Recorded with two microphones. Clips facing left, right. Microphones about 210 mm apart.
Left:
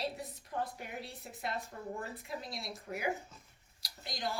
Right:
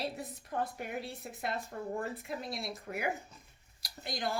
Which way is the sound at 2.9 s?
65° right (ahead or behind).